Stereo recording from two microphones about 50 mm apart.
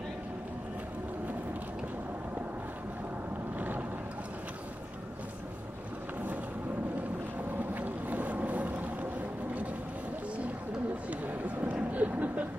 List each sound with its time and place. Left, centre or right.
3.5 s vehicle: right
7.5 s boat: right
11.1 s a sound: right